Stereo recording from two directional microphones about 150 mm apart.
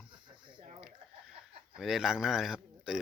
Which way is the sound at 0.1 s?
30° right (ahead or behind).